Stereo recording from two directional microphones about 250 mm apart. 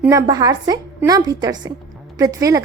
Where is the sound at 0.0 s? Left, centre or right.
Centre.